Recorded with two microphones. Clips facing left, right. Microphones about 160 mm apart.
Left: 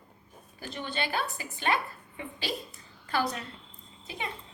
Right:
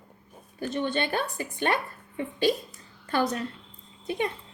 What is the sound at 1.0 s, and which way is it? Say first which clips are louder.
Speech: right 4 dB; 55° right (ahead or behind).